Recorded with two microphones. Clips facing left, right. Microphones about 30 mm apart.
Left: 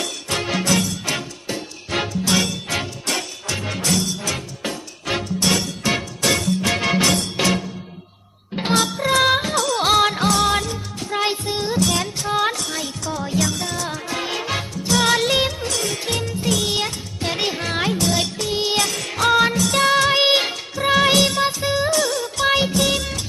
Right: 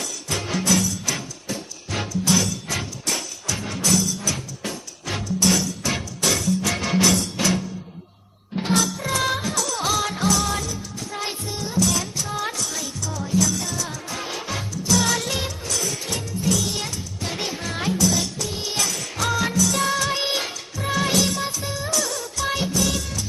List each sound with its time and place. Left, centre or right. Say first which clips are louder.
0.0 s music: left 4 dB; left